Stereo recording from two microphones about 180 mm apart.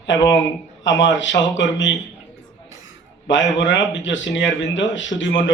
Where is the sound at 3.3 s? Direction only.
90° left.